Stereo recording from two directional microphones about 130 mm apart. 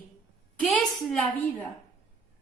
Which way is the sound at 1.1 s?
5° left (ahead or behind).